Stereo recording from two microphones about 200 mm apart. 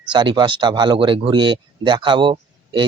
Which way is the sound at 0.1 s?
20° right (ahead or behind).